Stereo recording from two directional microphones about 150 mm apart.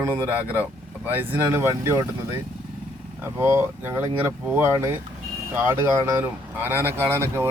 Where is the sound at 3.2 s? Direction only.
15° right (ahead or behind).